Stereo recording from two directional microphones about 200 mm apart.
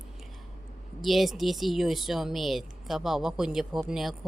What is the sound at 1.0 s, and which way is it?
Speech, centre (ahead or behind).